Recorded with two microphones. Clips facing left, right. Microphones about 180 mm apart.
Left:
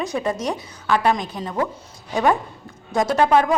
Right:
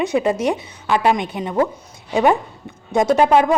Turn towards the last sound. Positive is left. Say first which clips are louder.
# right 3 dB
turn(degrees=-20)  # may be behind; listen again after turning